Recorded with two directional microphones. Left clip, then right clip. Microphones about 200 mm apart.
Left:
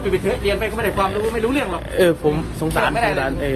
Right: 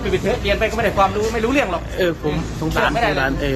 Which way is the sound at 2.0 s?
40° left (ahead or behind).